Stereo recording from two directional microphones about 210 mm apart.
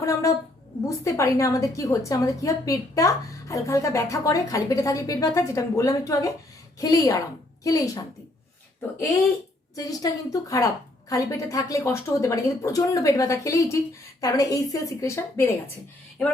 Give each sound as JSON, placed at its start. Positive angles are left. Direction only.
{"t": 0.0, "sound": "a woman's voice", "side_deg": 15}
{"t": 9.7, "sound": "a woman's voice", "side_deg": 15}